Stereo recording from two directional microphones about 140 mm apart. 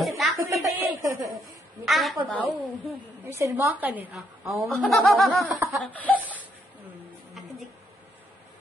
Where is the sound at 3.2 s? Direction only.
20° right (ahead or behind).